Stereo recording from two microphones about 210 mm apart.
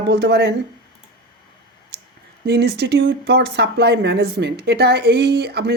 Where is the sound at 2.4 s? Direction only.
50° right (ahead or behind).